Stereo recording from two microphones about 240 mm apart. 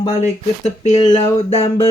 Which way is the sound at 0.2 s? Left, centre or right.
Left.